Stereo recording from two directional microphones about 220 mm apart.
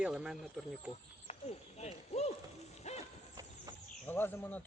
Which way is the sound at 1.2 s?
30° left (ahead or behind).